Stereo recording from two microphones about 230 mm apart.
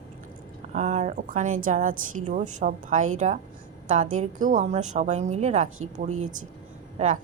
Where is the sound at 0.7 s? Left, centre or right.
Right.